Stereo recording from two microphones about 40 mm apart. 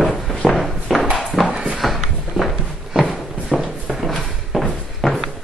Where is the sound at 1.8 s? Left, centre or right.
Centre.